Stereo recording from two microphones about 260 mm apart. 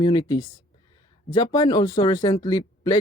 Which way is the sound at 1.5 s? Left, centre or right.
Centre.